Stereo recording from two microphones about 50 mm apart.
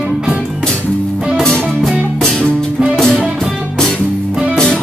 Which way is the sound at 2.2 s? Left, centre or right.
Centre.